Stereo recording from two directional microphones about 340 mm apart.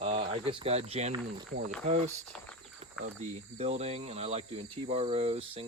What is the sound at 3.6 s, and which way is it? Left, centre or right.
Speech, centre.